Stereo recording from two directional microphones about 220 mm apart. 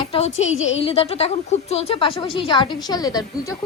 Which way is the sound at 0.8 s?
25° left (ahead or behind).